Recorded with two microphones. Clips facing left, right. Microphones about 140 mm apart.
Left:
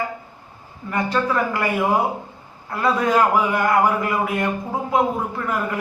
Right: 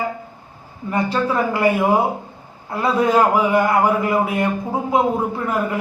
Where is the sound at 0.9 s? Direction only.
20° right (ahead or behind).